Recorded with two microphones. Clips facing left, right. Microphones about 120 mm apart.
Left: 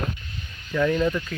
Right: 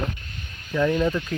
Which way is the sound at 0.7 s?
10° right (ahead or behind).